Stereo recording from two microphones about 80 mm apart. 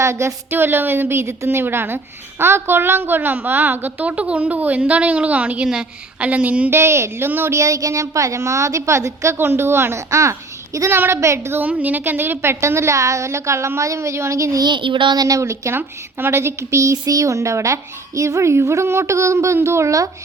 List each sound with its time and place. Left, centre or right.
0.0 s a woman's voice: right; by 6.7 s centre
6.7 s a woman's voice: right
7.6 s speech: right
11.5 s speech: right
14.6 s a sound: right
15.2 s speech: right